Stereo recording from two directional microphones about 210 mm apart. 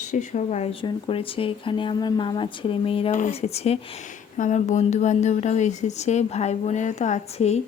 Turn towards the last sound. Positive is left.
turn(degrees=35)  # may be behind; listen again after turning